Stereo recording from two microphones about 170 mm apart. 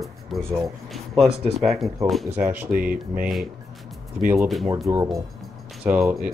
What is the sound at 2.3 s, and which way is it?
Speech, 10° right (ahead or behind).